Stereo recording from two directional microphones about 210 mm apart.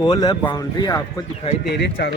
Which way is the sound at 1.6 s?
55° left (ahead or behind).